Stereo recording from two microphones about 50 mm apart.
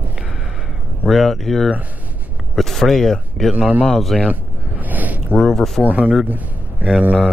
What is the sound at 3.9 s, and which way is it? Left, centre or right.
Speech, centre.